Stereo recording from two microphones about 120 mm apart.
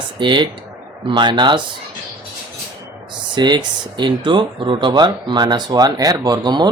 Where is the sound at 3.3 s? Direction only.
35° right (ahead or behind).